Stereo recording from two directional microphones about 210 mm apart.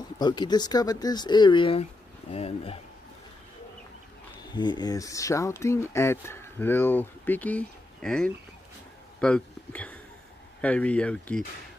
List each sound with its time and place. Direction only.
0.2 s speech: 20° left (ahead or behind)
4.4 s speech: 20° left (ahead or behind)